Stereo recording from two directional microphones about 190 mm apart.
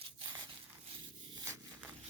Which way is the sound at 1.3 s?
15° right (ahead or behind).